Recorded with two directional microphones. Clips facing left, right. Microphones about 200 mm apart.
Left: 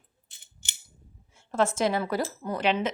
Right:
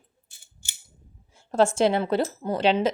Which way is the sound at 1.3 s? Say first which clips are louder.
Right 5 dB; 35° right (ahead or behind).